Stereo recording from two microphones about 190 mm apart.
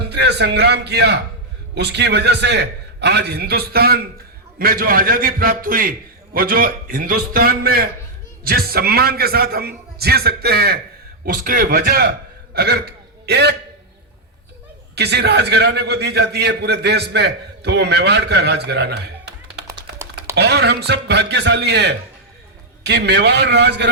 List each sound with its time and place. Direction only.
0.1 s a man's voice: 60° right (ahead or behind)
14.9 s a man's voice: 60° right (ahead or behind)
19.7 s a sound: 15° right (ahead or behind)
20.3 s a man's voice: 60° right (ahead or behind)